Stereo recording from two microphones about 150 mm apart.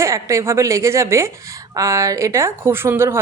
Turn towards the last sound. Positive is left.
turn(degrees=-15)  # may be behind; listen again after turning